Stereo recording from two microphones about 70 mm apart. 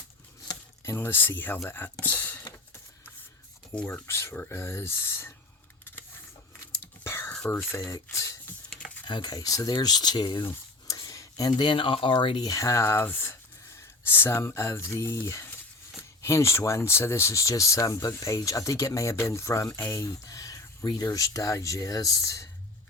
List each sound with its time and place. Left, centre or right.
0.9 s speech: left
4.0 s speech: left
6.7 s whispering: left
7.7 s speech: left
9.0 s speech: left
11.1 s a sound: left
12.5 s speech: left